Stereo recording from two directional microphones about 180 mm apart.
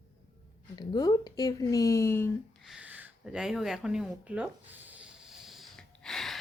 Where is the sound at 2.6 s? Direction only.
5° right (ahead or behind).